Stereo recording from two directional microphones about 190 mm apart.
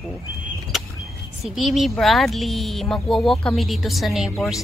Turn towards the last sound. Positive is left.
turn(degrees=0)  # may be behind; listen again after turning